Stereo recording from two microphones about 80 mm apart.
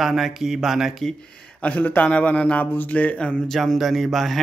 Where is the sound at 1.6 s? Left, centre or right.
Centre.